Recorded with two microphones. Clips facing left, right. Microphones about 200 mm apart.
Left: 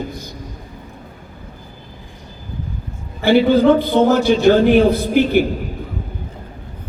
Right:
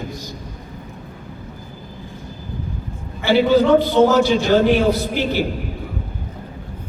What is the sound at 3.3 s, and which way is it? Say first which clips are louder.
A man's voice: left 2 dB; 55° left (ahead or behind).